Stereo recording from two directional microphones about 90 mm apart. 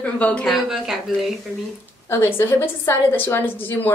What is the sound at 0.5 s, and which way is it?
Speech, 5° right (ahead or behind).